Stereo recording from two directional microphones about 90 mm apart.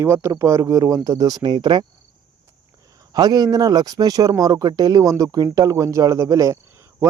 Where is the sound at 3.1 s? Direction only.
50° right (ahead or behind).